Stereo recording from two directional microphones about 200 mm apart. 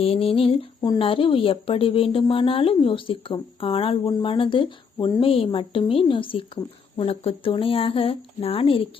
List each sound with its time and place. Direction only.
0.0 s speech: 30° left (ahead or behind)